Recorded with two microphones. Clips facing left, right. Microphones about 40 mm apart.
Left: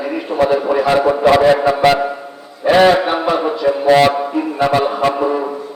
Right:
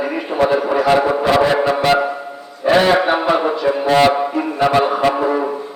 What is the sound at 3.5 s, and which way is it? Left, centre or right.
Speech, centre.